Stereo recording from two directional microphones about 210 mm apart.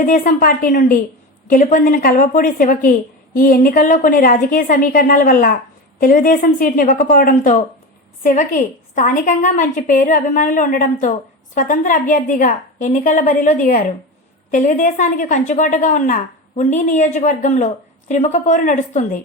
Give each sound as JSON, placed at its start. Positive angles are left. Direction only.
{"t": 0.0, "sound": "a woman's voice", "side_deg": 40}